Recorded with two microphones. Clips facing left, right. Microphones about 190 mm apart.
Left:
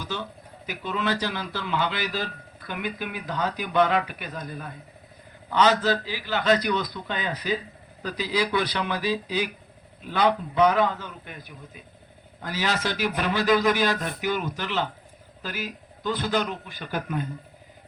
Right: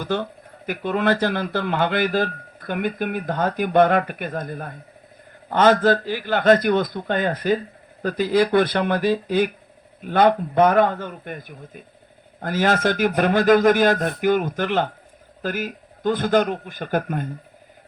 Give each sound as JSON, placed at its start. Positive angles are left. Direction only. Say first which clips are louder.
{"t": 0.0, "sound": "speech", "louder": "right 8 dB", "side_deg": -55}